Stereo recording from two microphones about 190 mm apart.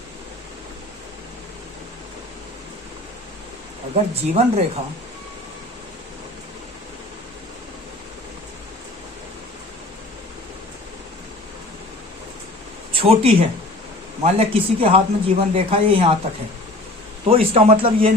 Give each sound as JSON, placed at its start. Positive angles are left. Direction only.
{"t": 3.9, "sound": "speech", "side_deg": -35}
{"t": 12.9, "sound": "speech", "side_deg": -30}
{"t": 17.2, "sound": "speech", "side_deg": -30}